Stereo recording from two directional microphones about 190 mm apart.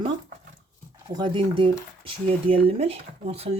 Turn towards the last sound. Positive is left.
turn(degrees=-35)  # may be behind; listen again after turning